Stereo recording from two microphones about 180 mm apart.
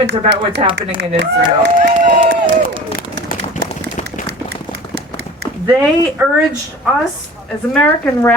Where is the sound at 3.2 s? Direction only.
45° left (ahead or behind).